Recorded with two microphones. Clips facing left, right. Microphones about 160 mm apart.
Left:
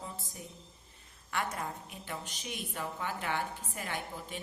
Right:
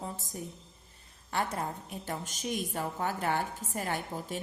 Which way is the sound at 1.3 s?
30° right (ahead or behind).